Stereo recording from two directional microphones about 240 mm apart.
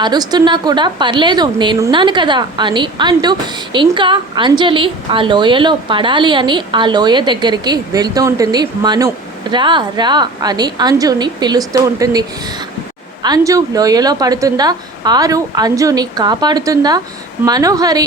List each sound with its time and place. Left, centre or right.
0.0 s a woman's voice: centre
13.2 s a woman's voice: centre